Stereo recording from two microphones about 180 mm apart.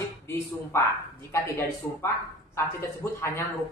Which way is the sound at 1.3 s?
15° left (ahead or behind).